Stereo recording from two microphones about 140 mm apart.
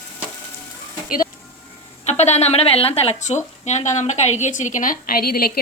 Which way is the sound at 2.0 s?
55° left (ahead or behind).